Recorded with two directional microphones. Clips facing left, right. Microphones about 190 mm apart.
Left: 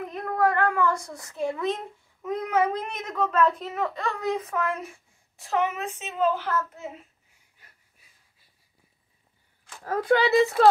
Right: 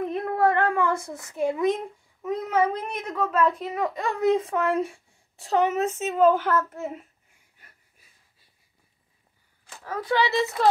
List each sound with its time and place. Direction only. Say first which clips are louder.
0.1 s a sound: even; 25° right (ahead or behind)
2.5 s a child's voice: right 1 dB; 10° right (ahead or behind); by 6.9 s 50° right (ahead or behind)
10.0 s speech: left 4 dB; 55° left (ahead or behind)